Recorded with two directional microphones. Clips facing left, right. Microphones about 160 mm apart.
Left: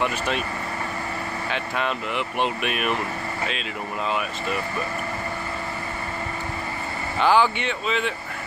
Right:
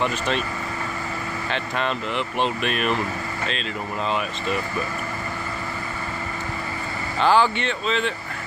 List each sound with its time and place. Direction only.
1.5 s speech: 5° left (ahead or behind)
7.2 s speech: 10° left (ahead or behind)